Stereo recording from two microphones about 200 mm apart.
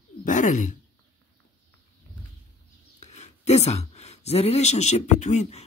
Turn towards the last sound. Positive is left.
turn(degrees=35)  # may be behind; listen again after turning